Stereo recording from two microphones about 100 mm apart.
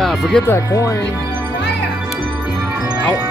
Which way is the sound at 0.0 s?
5° left (ahead or behind).